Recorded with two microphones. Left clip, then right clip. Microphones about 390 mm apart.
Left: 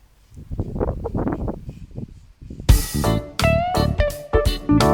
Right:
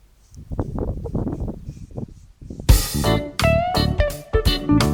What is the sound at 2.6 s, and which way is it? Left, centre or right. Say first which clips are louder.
Music: right 1 dB; centre.